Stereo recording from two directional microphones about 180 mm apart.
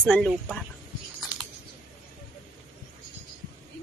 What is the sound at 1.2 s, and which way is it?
Typing, 5° right (ahead or behind).